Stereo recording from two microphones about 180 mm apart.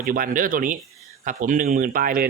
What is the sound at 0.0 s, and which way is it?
A man's voice, 50° right (ahead or behind).